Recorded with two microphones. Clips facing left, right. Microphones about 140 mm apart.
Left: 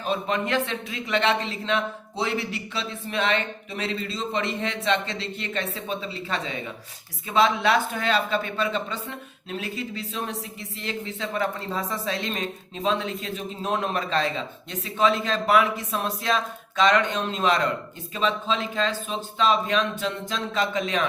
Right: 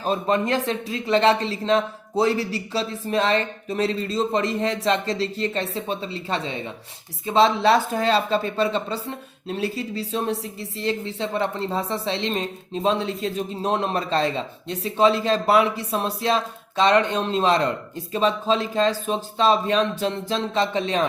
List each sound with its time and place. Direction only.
0.0 s speech: 35° right (ahead or behind)